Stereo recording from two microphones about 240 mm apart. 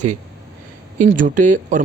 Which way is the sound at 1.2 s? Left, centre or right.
Right.